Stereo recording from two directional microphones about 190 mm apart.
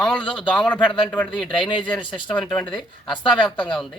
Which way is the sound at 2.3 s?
5° left (ahead or behind).